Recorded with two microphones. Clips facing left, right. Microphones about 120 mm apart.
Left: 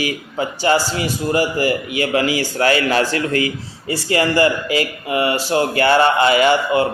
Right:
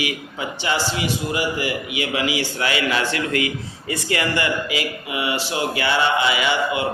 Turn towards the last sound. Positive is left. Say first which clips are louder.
# left 7 dB
turn(degrees=45)  # may be behind; listen again after turning